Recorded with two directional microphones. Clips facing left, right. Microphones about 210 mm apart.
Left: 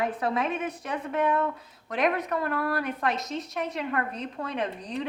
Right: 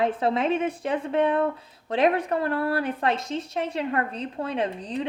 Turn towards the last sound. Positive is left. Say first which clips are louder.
# right 4 dB
turn(degrees=-30)  # may be behind; listen again after turning